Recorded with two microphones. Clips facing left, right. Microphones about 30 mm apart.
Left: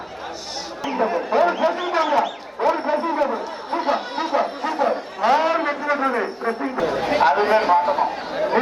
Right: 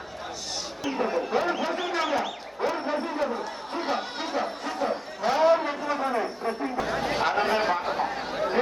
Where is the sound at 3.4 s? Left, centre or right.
Centre; by 5.6 s left.